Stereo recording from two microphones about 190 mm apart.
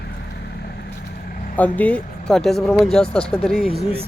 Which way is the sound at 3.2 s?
30° left (ahead or behind).